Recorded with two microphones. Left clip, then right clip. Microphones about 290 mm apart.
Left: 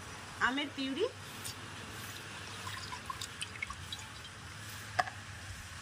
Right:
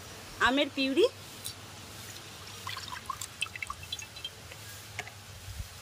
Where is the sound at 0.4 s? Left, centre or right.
Right.